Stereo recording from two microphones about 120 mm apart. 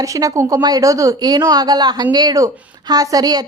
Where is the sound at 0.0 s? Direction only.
30° right (ahead or behind).